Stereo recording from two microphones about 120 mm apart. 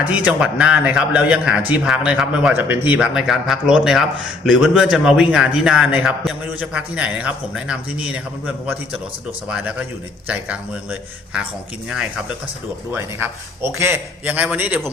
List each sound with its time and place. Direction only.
0.0 s a man's voice: 10° right (ahead or behind)
2.6 s a man's voice: 15° right (ahead or behind)
12.9 s a man's voice: 15° right (ahead or behind)